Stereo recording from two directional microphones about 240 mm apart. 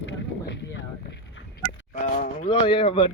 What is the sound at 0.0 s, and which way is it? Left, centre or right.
Boat, left.